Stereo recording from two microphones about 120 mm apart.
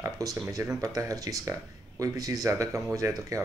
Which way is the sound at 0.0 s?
30° right (ahead or behind).